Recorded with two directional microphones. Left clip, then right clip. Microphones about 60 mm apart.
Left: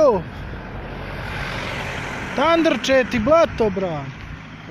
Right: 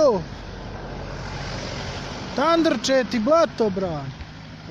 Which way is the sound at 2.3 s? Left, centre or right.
Right.